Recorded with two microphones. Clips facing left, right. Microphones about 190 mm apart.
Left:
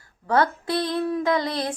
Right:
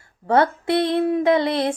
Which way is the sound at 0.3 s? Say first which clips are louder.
Right 4 dB; 25° right (ahead or behind).